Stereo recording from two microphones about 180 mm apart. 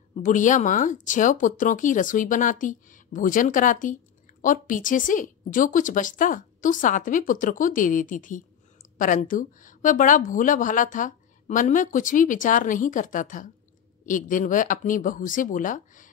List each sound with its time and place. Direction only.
0.1 s speech: 45° left (ahead or behind)